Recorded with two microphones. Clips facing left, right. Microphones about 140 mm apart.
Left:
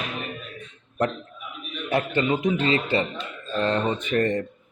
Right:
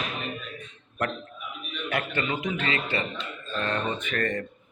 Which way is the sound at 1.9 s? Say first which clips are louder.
Left 6 dB; 30° left (ahead or behind).